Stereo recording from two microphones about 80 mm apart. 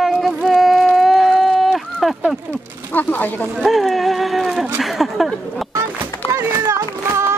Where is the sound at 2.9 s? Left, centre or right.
Left.